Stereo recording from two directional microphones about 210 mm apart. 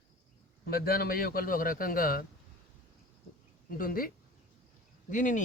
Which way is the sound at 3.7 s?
45° left (ahead or behind).